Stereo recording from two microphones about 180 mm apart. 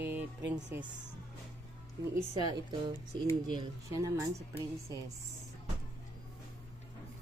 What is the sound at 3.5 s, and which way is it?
A woman's voice, 20° right (ahead or behind).